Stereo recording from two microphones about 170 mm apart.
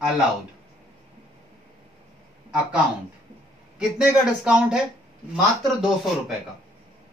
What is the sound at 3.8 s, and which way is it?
Speech, 5° right (ahead or behind).